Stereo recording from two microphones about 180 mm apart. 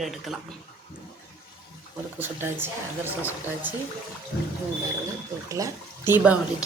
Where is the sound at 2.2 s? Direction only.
10° right (ahead or behind).